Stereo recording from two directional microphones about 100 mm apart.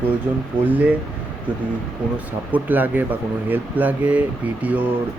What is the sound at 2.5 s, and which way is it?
Speech, 20° right (ahead or behind).